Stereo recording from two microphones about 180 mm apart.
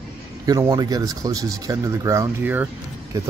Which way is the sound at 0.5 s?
20° right (ahead or behind).